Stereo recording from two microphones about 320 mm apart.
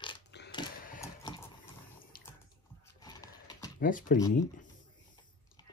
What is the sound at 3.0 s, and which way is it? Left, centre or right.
Horse, centre.